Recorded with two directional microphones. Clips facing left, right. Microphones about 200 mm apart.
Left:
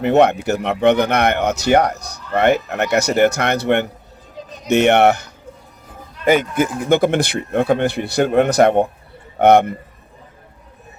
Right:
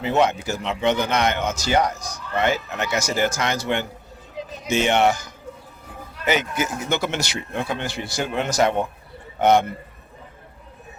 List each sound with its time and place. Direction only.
0.0 s speech: 65° left (ahead or behind)
4.4 s a sound: centre (ahead or behind)
4.7 s speech: 65° left (ahead or behind)
6.2 s speech: 50° left (ahead or behind)